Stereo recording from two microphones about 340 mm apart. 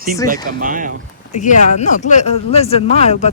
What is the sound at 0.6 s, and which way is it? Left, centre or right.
Speech, right.